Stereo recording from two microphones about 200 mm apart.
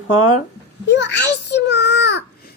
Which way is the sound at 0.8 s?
60° left (ahead or behind).